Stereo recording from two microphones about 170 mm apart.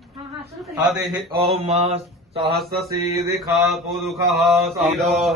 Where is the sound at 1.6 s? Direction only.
40° right (ahead or behind).